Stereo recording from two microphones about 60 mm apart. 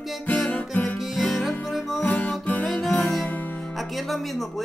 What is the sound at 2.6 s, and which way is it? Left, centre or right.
Music, centre.